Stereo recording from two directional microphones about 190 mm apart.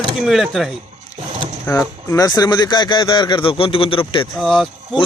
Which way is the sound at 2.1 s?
20° left (ahead or behind).